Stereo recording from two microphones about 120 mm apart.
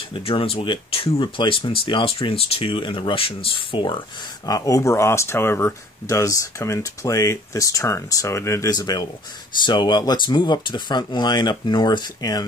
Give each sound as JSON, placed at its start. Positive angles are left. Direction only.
{"t": 0.1, "sound": "speech", "side_deg": 50}
{"t": 4.5, "sound": "speech", "side_deg": 30}